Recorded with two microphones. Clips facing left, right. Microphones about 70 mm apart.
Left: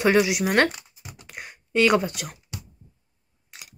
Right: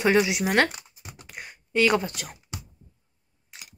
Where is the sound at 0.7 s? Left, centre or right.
Right.